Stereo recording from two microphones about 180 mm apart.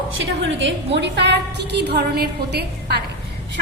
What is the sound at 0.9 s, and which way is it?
A woman's voice, 75° right (ahead or behind).